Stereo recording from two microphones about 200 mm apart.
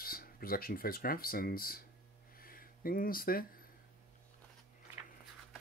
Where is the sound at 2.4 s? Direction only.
45° left (ahead or behind).